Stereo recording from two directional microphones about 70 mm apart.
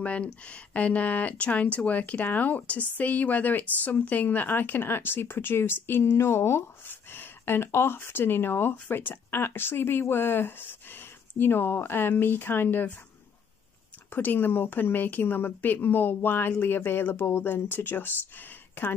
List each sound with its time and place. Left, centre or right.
0.0 s a woman's voice: centre
14.1 s a woman's voice: left